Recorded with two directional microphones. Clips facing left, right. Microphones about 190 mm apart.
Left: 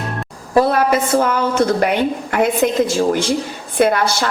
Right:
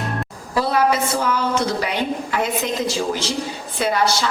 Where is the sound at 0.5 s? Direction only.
50° left (ahead or behind).